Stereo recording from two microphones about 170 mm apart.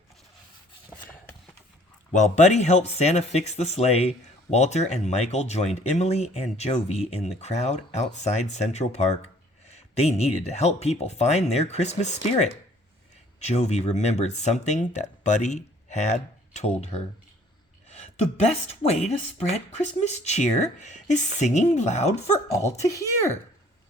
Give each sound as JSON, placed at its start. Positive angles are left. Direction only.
{"t": 2.1, "sound": "speech", "side_deg": 45}
{"t": 18.4, "sound": "speech", "side_deg": 40}
{"t": 22.9, "sound": "speech", "side_deg": 20}